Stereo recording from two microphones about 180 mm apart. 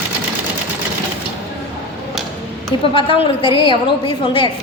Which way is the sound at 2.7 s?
30° left (ahead or behind).